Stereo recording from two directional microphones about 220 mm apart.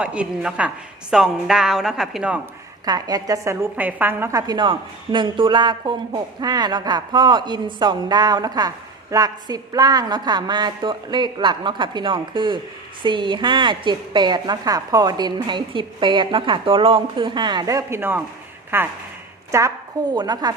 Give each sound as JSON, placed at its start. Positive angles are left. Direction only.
{"t": 0.0, "sound": "a woman's voice", "side_deg": -5}
{"t": 2.8, "sound": "a woman's voice", "side_deg": -15}